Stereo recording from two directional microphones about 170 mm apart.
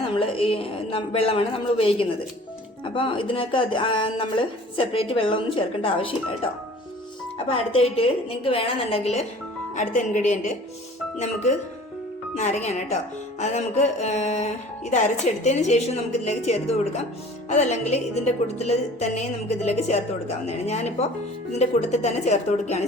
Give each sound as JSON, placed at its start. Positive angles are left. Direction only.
{"t": 0.2, "sound": "speech", "side_deg": 30}